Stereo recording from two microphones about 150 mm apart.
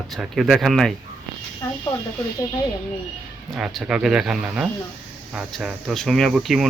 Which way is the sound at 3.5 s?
Centre (ahead or behind).